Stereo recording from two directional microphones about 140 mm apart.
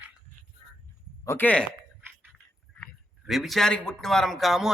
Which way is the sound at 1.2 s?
15° left (ahead or behind).